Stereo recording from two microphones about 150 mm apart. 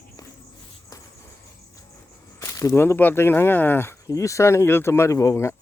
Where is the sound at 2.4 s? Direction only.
20° left (ahead or behind).